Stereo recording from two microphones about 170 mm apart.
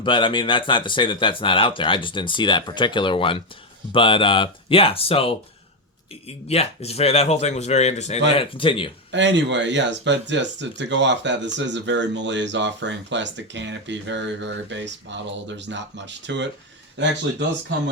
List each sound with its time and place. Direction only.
0.0 s speech: 30° left (ahead or behind)
9.1 s speech: 90° right